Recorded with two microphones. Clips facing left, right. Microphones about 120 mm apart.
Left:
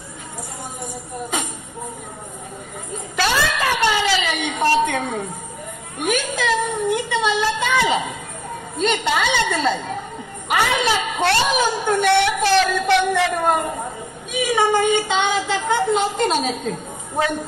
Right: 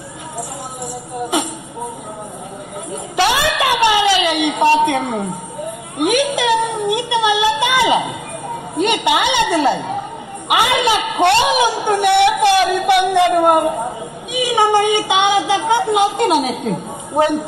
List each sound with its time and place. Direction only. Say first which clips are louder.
2.9 s a woman's voice: right 5 dB; 15° right (ahead or behind)